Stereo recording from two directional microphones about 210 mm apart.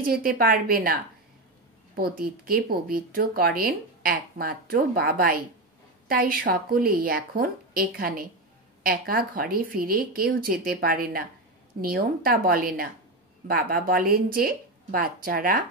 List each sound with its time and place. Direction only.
0.0 s speech: 45° right (ahead or behind)
2.0 s speech: 45° right (ahead or behind)